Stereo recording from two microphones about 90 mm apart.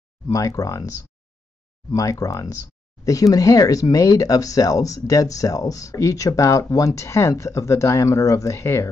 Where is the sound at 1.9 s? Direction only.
40° left (ahead or behind).